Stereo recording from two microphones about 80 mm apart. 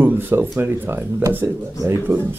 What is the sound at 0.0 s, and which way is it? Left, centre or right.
Speech, right.